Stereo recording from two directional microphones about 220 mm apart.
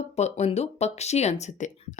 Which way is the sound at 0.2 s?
30° left (ahead or behind).